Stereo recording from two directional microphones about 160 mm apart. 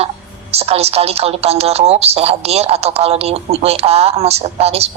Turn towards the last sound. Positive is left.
turn(degrees=-40)  # may be behind; listen again after turning